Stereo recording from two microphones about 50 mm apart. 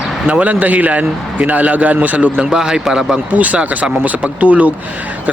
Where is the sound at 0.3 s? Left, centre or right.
Right.